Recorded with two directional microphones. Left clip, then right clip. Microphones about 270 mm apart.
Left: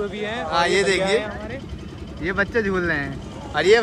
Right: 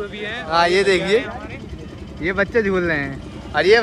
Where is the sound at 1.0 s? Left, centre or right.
Left.